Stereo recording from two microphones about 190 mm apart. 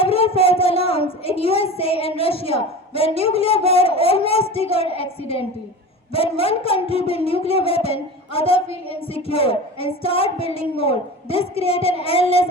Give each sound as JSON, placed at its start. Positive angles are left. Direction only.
{"t": 0.0, "sound": "a woman's voice", "side_deg": 30}
{"t": 3.7, "sound": "a sound", "side_deg": 30}
{"t": 4.8, "sound": "a woman's voice", "side_deg": 30}